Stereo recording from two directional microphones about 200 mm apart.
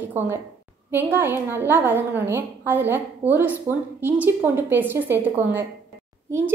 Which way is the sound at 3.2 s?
30° right (ahead or behind).